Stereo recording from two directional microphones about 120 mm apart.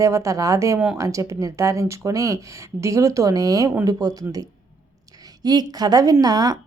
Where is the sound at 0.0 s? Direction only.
25° right (ahead or behind).